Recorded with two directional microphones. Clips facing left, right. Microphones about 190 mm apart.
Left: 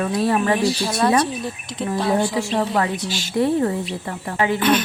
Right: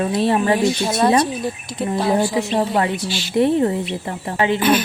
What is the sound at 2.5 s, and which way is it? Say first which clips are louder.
A woman's voice: right 1 dB; 25° right (ahead or behind).